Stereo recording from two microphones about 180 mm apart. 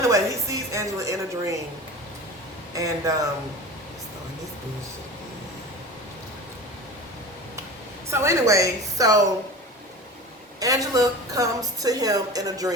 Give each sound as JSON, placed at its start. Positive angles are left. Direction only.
{"t": 0.0, "sound": "a woman's voice", "side_deg": -15}
{"t": 2.7, "sound": "a woman's voice", "side_deg": -20}
{"t": 8.1, "sound": "a woman's voice", "side_deg": -15}
{"t": 10.6, "sound": "a woman's voice", "side_deg": -20}